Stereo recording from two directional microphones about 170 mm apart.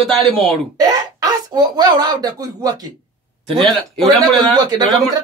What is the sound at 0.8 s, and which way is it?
Speech, 25° right (ahead or behind).